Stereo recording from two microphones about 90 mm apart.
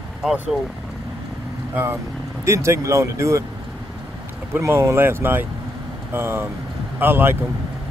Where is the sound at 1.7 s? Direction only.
25° right (ahead or behind).